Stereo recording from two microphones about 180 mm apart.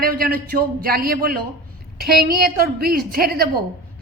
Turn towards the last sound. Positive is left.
turn(degrees=-55)  # may be behind; listen again after turning